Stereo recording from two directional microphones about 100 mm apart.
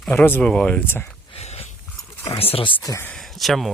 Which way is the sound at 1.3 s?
80° left.